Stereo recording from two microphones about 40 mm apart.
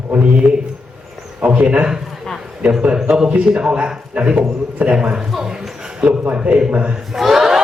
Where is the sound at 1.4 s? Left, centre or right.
Right.